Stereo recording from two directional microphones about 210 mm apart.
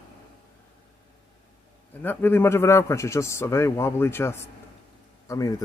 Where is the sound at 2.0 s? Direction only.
10° left (ahead or behind).